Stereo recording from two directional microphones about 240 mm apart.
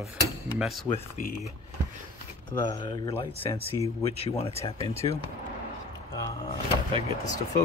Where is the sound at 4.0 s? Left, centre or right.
Left.